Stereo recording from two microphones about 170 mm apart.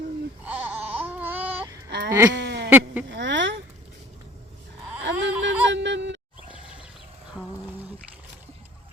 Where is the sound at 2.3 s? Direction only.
90° right.